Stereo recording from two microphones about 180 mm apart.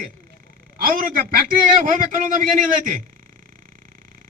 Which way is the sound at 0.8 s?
50° right (ahead or behind).